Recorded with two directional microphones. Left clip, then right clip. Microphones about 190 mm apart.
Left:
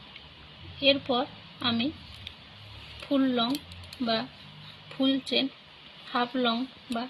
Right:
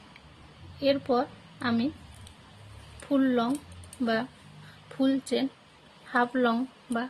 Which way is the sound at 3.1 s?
30° right (ahead or behind).